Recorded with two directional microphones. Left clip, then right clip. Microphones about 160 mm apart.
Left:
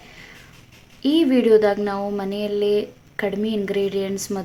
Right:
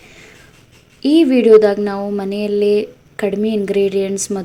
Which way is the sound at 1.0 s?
20° right (ahead or behind).